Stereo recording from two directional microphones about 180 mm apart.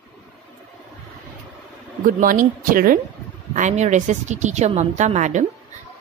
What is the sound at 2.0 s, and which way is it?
Speech, 50° right (ahead or behind).